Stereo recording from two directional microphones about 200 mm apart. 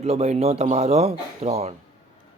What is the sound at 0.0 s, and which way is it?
Speech, 35° right (ahead or behind).